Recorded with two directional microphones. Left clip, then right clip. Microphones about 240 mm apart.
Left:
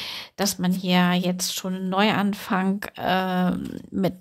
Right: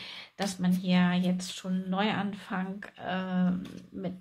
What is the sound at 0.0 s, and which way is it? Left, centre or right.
Speech, left.